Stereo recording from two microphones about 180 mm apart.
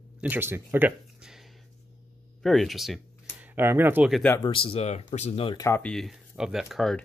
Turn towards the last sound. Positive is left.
turn(degrees=0)  # may be behind; listen again after turning